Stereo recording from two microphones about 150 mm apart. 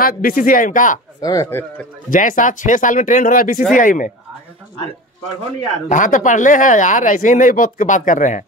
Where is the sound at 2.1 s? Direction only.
60° left (ahead or behind).